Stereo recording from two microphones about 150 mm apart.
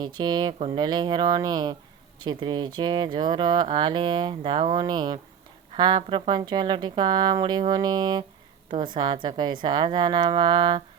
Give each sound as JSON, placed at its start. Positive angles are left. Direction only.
{"t": 0.0, "sound": "a woman's voice", "side_deg": -30}